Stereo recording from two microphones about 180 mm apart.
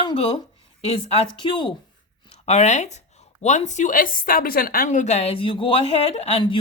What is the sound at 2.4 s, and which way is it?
Speech, 35° left (ahead or behind).